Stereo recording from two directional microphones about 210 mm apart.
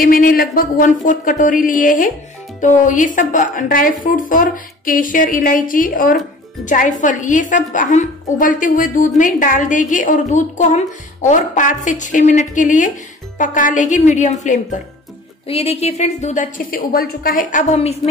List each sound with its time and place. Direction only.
0.0 s a woman's voice: 45° left (ahead or behind)